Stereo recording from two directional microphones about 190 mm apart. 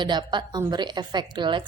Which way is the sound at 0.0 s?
25° right (ahead or behind).